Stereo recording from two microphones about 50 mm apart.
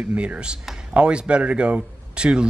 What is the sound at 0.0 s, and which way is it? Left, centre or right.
A man's voice, right.